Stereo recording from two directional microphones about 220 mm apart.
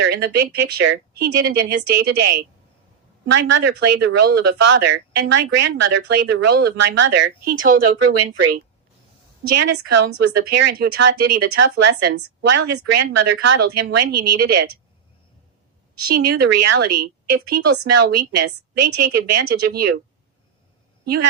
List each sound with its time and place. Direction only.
0.0 s speech: 45° right (ahead or behind)
7.9 s speech: 90° right
9.5 s speech: 50° right (ahead or behind)
16.0 s speech: 45° right (ahead or behind)
21.0 s a woman's voice: 45° right (ahead or behind)